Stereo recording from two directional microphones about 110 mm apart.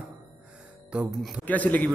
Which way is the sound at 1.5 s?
15° left (ahead or behind).